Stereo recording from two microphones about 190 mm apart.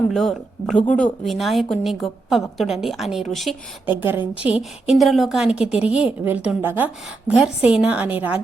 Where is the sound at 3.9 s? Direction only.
10° right (ahead or behind).